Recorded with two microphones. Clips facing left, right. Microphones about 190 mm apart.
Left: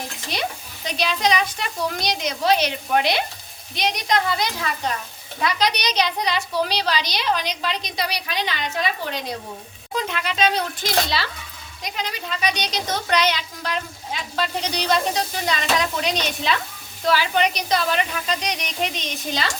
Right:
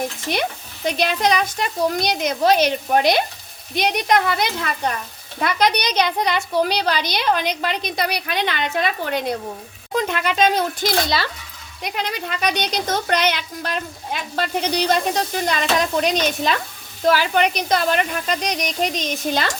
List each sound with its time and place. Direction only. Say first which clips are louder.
0.9 s speech: right 3 dB; 55° right (ahead or behind)
3.8 s a woman's voice: right 4 dB; 55° right (ahead or behind)
11.8 s a woman's voice: right 4 dB; 60° right (ahead or behind)